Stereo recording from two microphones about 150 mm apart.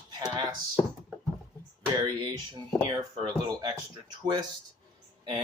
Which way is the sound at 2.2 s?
30° right (ahead or behind).